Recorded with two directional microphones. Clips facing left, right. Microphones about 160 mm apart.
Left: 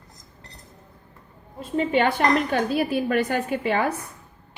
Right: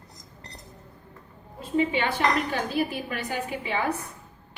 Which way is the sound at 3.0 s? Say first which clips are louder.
Left 8 dB; 55° left (ahead or behind).